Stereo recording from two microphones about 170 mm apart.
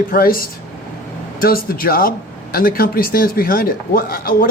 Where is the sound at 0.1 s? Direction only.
60° left (ahead or behind).